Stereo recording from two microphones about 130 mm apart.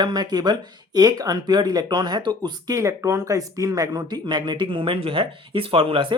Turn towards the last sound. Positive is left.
turn(degrees=-45)  # may be behind; listen again after turning